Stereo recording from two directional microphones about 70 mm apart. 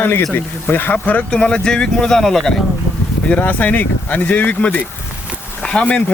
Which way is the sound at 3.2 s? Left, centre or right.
Centre.